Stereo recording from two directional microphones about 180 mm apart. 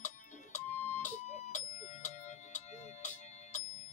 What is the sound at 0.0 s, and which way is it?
Music, 40° left (ahead or behind).